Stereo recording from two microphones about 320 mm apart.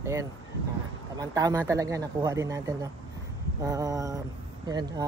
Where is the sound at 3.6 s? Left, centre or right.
Centre.